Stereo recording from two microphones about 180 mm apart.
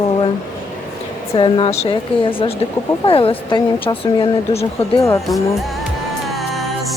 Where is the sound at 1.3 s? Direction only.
30° left (ahead or behind).